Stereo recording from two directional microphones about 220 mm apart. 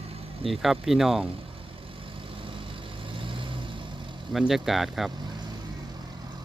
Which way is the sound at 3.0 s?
25° right (ahead or behind).